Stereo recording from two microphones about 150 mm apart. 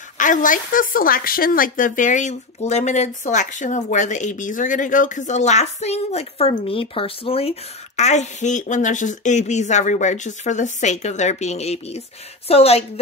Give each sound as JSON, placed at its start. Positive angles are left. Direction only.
{"t": 0.2, "sound": "speech", "side_deg": 60}